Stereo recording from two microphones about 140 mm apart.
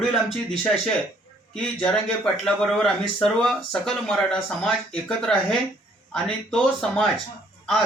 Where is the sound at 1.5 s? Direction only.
5° left (ahead or behind).